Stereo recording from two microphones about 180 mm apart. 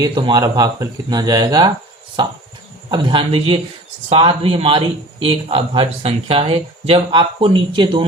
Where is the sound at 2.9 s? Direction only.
25° right (ahead or behind).